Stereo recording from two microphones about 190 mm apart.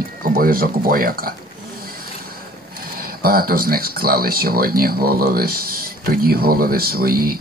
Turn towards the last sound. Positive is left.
turn(degrees=-50)  # may be behind; listen again after turning